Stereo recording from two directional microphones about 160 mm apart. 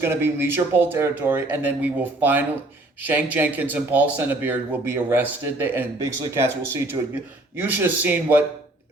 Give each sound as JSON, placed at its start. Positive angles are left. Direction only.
{"t": 0.0, "sound": "speech", "side_deg": -15}